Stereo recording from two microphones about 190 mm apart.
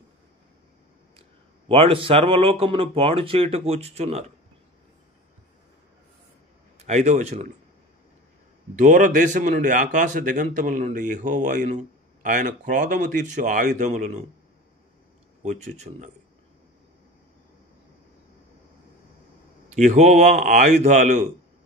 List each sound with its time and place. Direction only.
1.7 s speech: 30° right (ahead or behind)
6.9 s speech: 40° right (ahead or behind)
8.7 s a man's voice: 40° right (ahead or behind)
15.4 s speech: 35° right (ahead or behind)
19.7 s speech: 40° right (ahead or behind)